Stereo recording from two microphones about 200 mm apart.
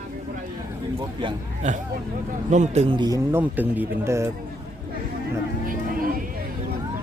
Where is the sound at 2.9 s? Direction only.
20° right (ahead or behind).